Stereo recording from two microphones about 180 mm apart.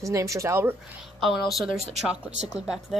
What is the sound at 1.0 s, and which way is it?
Speech, centre (ahead or behind).